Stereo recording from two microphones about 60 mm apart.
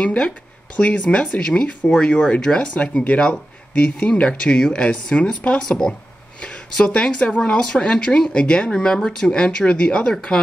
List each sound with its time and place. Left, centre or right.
0.0 s speech: centre
2.7 s speech: left